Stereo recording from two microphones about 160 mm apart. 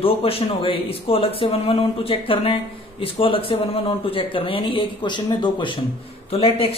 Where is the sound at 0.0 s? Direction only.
35° left (ahead or behind).